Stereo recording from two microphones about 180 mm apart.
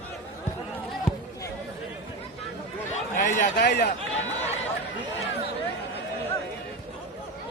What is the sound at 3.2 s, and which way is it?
Speech, 45° left (ahead or behind).